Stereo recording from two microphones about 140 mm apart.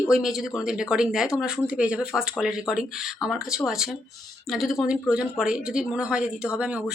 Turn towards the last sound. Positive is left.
turn(degrees=-10)  # may be behind; listen again after turning